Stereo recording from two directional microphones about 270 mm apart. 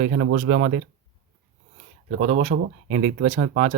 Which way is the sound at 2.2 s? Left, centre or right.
Right.